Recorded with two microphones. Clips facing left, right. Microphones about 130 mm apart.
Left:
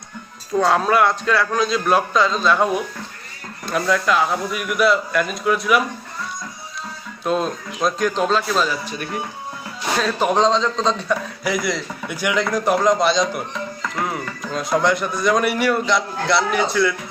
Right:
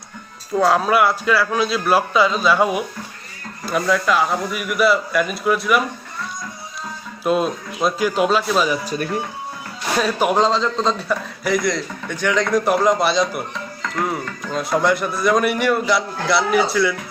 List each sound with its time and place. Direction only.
0.6 s a man's voice: 5° right (ahead or behind)
7.3 s speech: 5° right (ahead or behind)
8.8 s speech: 40° right (ahead or behind)
10.0 s a man's voice: 10° right (ahead or behind)